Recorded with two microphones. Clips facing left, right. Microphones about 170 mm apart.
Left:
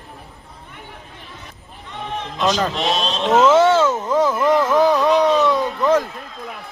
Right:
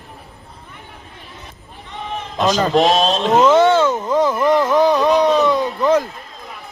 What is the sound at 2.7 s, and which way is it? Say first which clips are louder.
Speech: right 8 dB; 40° right (ahead or behind).